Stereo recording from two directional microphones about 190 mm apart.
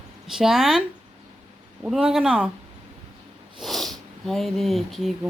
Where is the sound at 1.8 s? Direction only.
5° right (ahead or behind).